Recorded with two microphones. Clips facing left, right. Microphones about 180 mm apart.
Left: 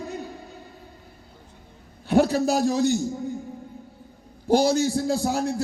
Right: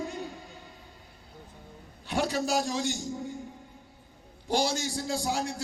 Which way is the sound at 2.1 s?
45° left (ahead or behind).